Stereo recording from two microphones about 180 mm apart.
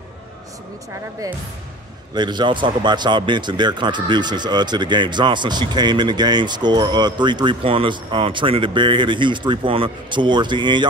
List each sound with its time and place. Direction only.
2.1 s a man's voice: 25° right (ahead or behind)